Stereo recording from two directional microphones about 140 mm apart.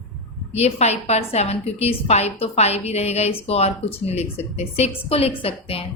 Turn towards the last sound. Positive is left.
turn(degrees=40)  # may be behind; listen again after turning